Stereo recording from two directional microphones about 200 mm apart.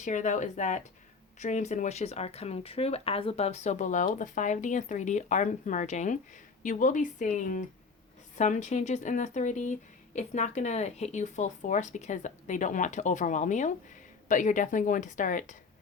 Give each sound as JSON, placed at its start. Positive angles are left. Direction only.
{"t": 0.0, "sound": "speech", "side_deg": 40}